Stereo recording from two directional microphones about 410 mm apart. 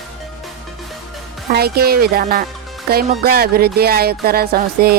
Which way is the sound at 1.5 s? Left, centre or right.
Right.